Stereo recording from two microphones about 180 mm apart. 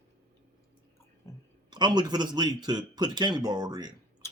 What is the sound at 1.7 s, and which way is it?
A man's voice, 25° right (ahead or behind).